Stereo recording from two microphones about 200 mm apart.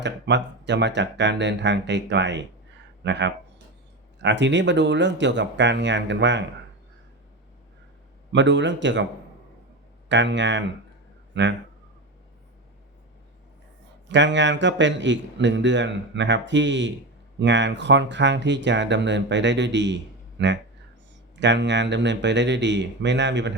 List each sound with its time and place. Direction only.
0.0 s a man's voice: 60° right (ahead or behind)
8.3 s a man's voice: 65° right (ahead or behind)
10.1 s a man's voice: 65° right (ahead or behind)
14.1 s a man's voice: 65° right (ahead or behind)